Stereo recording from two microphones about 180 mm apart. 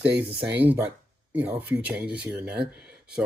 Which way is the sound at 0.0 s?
10° right (ahead or behind).